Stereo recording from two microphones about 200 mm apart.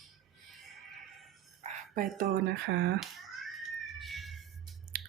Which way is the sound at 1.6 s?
35° right (ahead or behind).